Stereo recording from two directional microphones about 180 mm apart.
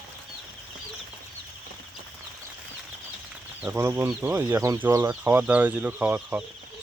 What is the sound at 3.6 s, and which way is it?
Speech, 15° right (ahead or behind).